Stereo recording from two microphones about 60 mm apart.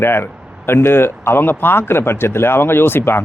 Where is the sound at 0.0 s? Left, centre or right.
Left.